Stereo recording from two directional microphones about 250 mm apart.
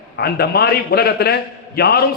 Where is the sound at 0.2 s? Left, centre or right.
Left.